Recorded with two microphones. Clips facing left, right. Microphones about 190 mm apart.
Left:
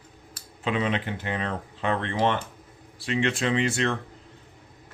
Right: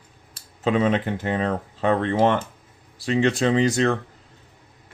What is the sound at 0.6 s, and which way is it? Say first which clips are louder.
Speech: right 6 dB; 40° right (ahead or behind).